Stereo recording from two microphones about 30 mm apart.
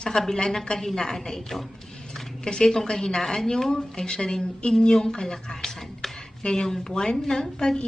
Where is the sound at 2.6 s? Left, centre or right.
Centre.